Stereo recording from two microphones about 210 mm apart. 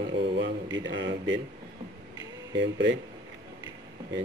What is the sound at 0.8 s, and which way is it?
Speech, 60° right (ahead or behind).